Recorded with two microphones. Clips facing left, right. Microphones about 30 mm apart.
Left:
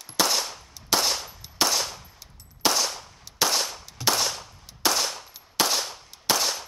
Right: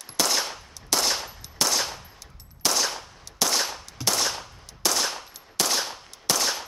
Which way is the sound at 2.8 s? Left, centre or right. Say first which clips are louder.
Right 2 dB; centre.